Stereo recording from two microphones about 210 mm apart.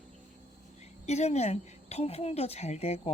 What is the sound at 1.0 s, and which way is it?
Speech, 30° left (ahead or behind).